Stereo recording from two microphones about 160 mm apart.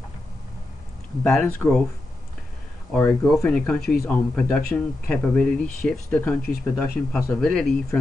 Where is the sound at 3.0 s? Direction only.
15° left (ahead or behind).